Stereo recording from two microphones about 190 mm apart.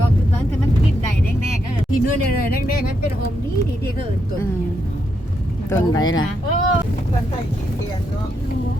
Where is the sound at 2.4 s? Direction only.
50° left (ahead or behind).